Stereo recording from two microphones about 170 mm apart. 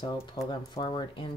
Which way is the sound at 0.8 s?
30° left (ahead or behind).